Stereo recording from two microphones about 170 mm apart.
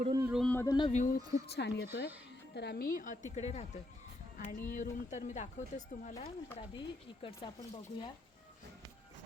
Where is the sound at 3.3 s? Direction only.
40° left (ahead or behind).